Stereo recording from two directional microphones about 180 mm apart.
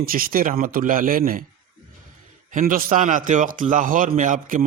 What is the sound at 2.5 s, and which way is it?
A man's voice, 50° right (ahead or behind).